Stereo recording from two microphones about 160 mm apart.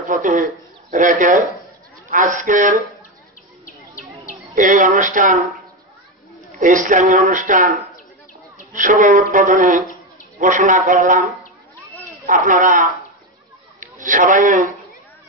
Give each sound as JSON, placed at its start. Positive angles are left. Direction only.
{"t": 0.1, "sound": "speech", "side_deg": -55}
{"t": 3.6, "sound": "bird", "side_deg": 55}
{"t": 4.6, "sound": "speech", "side_deg": -55}
{"t": 6.6, "sound": "speech", "side_deg": -55}
{"t": 8.7, "sound": "speech", "side_deg": -55}
{"t": 12.3, "sound": "a man's voice", "side_deg": -55}